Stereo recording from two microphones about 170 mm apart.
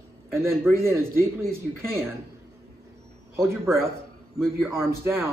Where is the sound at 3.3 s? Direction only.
15° right (ahead or behind).